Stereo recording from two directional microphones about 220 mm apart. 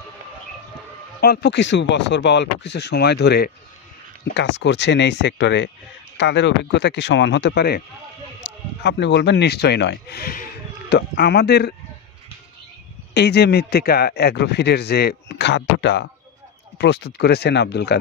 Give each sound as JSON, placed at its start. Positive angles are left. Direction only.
{"t": 1.2, "sound": "a man's voice", "side_deg": 45}
{"t": 13.1, "sound": "a man's voice", "side_deg": 50}